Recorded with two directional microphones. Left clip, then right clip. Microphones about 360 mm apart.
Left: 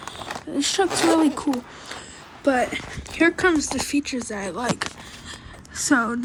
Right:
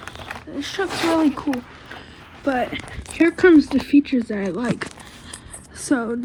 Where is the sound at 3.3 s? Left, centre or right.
Centre.